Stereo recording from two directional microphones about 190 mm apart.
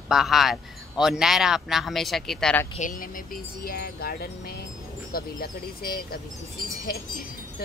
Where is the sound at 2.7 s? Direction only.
45° left (ahead or behind).